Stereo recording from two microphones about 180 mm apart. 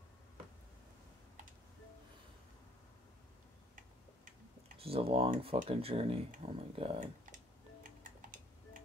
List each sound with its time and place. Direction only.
4.7 s speech: 30° right (ahead or behind)